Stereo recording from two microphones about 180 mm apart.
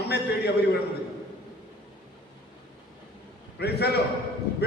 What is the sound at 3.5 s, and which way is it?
Speech, 65° left (ahead or behind).